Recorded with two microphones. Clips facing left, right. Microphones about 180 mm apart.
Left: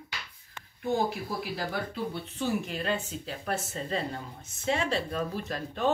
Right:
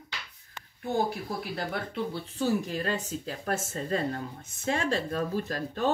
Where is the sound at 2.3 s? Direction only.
40° right (ahead or behind).